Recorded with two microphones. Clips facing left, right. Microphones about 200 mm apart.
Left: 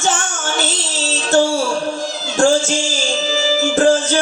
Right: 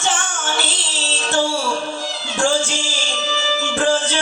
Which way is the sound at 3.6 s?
45° left (ahead or behind).